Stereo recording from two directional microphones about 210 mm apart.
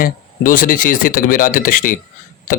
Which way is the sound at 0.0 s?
40° left (ahead or behind).